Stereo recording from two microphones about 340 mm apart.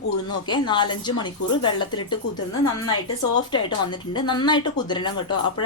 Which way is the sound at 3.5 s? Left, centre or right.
Centre.